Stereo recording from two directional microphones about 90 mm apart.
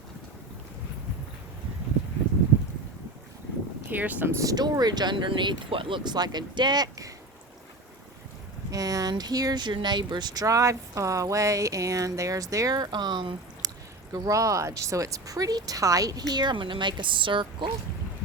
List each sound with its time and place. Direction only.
3.8 s speech: 20° right (ahead or behind)
4.4 s speech: 45° right (ahead or behind)
8.7 s speech: 40° right (ahead or behind); by 13.7 s 55° right (ahead or behind)
14.1 s speech: 40° right (ahead or behind); by 17.7 s 65° right (ahead or behind)